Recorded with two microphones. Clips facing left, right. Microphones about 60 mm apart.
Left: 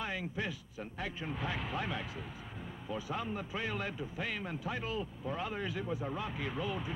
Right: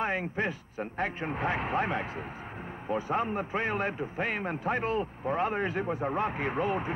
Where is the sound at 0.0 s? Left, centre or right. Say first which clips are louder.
Right 8 dB; right.